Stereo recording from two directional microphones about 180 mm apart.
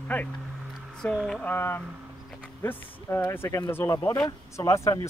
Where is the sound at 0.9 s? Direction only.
5° left (ahead or behind).